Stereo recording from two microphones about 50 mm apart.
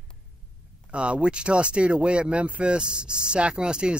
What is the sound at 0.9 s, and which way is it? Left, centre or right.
Speech, right.